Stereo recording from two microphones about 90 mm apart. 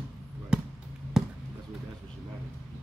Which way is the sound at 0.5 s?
10° right (ahead or behind).